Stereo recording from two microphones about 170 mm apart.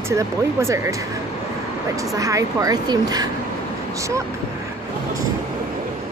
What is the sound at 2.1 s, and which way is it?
Speech, 20° right (ahead or behind).